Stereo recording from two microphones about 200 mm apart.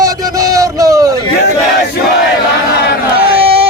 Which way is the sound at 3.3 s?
30° right (ahead or behind).